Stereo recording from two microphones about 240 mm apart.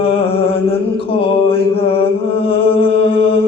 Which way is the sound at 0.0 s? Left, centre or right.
Left.